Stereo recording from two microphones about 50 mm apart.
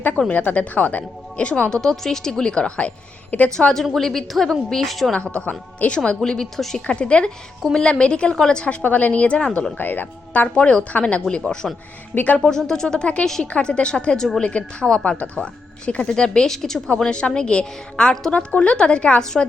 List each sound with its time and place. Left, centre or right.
0.3 s speech: left
1.7 s a woman's voice: centre; by 3.5 s left
3.9 s a woman's voice: centre
5.1 s speech: left
6.2 s a woman's voice: centre
6.8 s a woman's voice: left
8.8 s speech: left
9.7 s speech: left
10.5 s speech: left
12.1 s speech: left
12.4 s a woman's voice: centre